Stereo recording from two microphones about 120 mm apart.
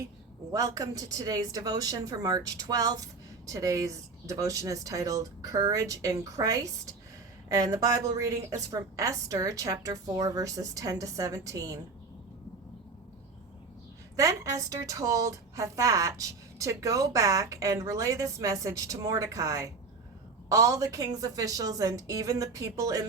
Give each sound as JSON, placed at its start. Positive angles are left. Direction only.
{"t": 0.5, "sound": "a woman's voice", "side_deg": -30}
{"t": 14.2, "sound": "a woman's voice", "side_deg": -25}